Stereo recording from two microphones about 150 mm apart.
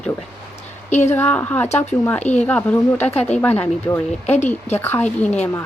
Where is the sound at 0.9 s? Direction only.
50° left (ahead or behind).